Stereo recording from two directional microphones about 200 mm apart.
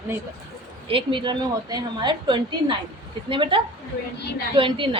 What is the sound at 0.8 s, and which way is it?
A woman's voice, 25° right (ahead or behind).